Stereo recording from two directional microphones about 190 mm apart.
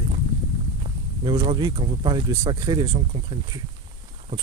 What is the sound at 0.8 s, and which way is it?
Speech, 20° right (ahead or behind).